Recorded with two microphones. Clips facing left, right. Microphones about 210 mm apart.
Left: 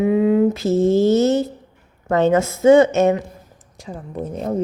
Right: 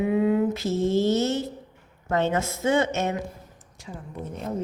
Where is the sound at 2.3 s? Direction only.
90° left.